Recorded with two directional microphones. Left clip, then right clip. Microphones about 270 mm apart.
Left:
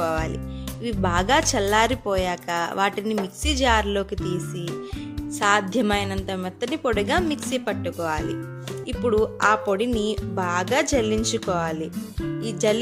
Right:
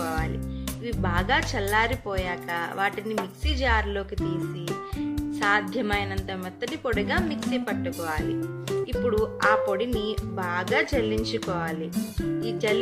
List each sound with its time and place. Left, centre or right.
0.0 s music: left
0.9 s speech: left
5.4 s speech: left
9.2 s speech: left